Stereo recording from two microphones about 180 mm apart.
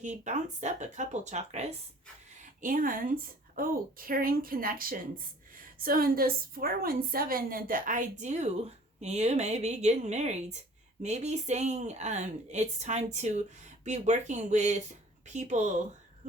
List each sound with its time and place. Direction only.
0.0 s a woman's voice: 40° right (ahead or behind)
2.4 s a woman's voice: 50° right (ahead or behind)